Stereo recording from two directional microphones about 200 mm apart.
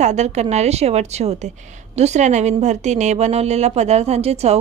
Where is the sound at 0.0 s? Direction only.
35° right (ahead or behind).